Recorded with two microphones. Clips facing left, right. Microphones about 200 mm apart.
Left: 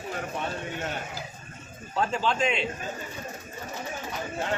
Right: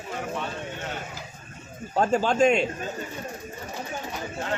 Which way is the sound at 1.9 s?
45° right (ahead or behind).